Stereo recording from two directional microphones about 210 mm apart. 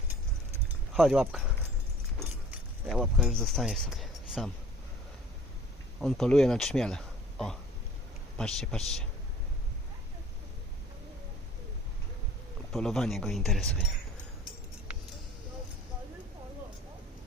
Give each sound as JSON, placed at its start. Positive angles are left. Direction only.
{"t": 0.5, "sound": "a sound", "side_deg": 0}
{"t": 2.1, "sound": "keys jangling", "side_deg": 0}
{"t": 6.0, "sound": "speech", "side_deg": 0}
{"t": 12.7, "sound": "speech", "side_deg": 0}